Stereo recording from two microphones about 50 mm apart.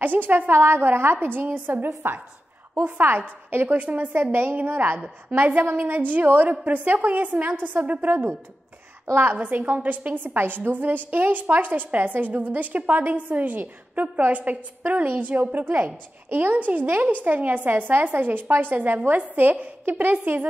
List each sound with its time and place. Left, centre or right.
0.0 s a woman's voice: right
16.5 s a woman's voice: right